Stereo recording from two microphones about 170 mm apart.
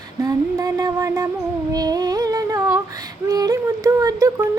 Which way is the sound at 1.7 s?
25° right (ahead or behind).